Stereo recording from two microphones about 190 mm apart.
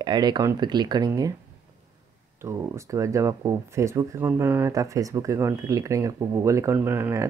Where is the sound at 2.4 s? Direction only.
15° right (ahead or behind).